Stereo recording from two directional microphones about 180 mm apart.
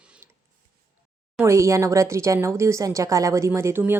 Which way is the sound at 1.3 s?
15° right (ahead or behind).